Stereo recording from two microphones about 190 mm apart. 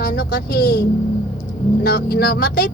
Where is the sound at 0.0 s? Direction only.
55° left (ahead or behind).